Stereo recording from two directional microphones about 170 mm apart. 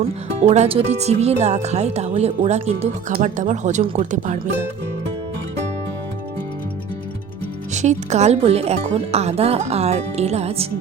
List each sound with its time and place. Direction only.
0.4 s speech: 40° right (ahead or behind)
7.7 s speech: 45° right (ahead or behind)